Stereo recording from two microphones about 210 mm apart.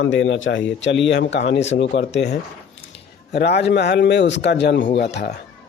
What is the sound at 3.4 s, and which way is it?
A man's voice, 50° left (ahead or behind).